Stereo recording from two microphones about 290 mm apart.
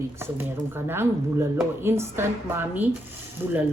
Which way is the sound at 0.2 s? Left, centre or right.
Centre.